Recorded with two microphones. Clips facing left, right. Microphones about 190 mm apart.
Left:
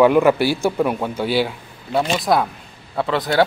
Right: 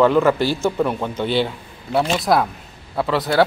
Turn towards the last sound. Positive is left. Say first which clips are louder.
# even
turn(degrees=0)  # may be behind; listen again after turning